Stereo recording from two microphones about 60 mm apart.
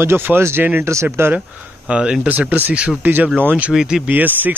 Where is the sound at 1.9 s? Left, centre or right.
Centre.